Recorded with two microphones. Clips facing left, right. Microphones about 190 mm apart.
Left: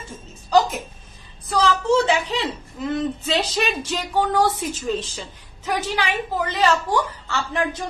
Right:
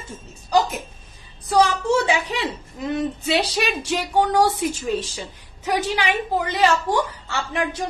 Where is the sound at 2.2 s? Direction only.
15° right (ahead or behind).